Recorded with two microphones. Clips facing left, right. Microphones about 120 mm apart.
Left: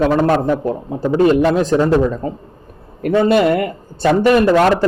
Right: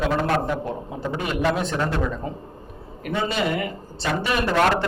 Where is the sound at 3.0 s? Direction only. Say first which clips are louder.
Left 12 dB; 55° left (ahead or behind).